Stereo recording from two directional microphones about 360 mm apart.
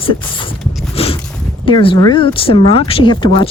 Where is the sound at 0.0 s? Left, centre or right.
Centre.